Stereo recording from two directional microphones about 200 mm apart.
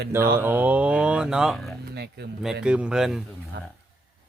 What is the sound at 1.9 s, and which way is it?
Speech, 55° right (ahead or behind).